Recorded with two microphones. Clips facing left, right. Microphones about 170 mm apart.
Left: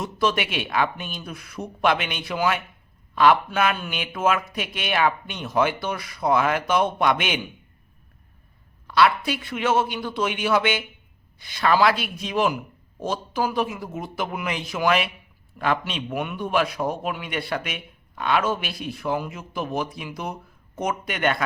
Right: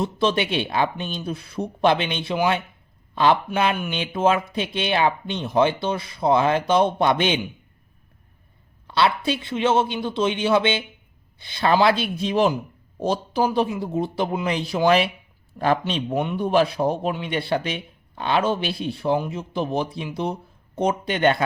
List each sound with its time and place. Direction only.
0.0 s a man's voice: 30° right (ahead or behind)
8.9 s a man's voice: 30° right (ahead or behind)